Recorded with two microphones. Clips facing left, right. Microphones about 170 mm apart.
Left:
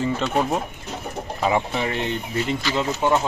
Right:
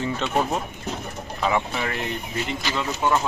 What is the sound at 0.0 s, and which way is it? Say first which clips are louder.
Speech: left 2 dB; 5° left (ahead or behind).